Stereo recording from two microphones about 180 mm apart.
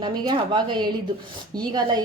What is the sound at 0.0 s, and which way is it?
Speech, 25° right (ahead or behind).